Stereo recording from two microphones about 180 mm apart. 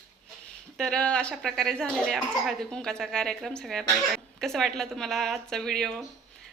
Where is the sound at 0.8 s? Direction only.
5° left (ahead or behind).